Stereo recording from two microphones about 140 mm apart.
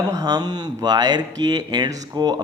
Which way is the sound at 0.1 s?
30° right (ahead or behind).